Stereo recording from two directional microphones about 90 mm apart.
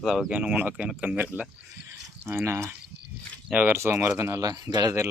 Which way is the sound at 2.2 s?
30° right (ahead or behind).